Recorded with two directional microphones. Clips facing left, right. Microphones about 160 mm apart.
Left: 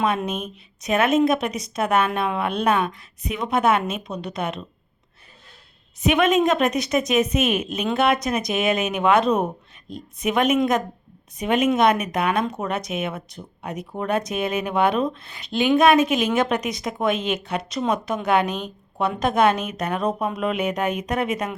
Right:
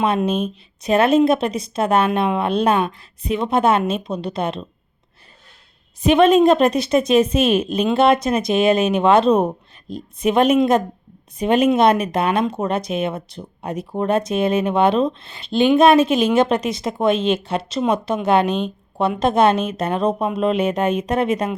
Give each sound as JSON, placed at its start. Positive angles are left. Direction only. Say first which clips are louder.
{"t": 0.3, "sound": "speech", "louder": "right 8 dB", "side_deg": -30}
{"t": 6.1, "sound": "a woman's voice", "louder": "right 6 dB", "side_deg": -30}